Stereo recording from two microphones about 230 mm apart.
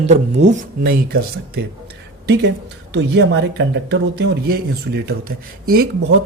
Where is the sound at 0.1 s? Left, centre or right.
Right.